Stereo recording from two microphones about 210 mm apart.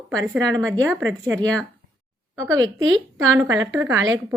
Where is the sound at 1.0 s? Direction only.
15° right (ahead or behind).